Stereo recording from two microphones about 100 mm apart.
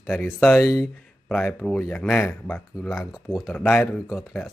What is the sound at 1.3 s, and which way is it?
A man's voice, 5° left (ahead or behind).